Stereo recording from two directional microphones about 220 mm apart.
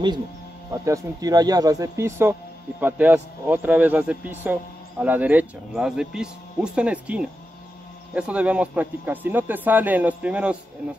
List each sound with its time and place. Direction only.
0.7 s speech: 15° right (ahead or behind)